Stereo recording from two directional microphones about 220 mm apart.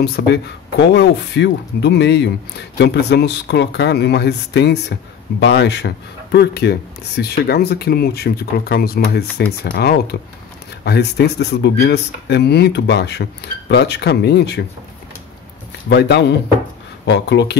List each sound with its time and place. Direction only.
0.0 s speech: 50° left (ahead or behind)
15.9 s speech: 50° left (ahead or behind)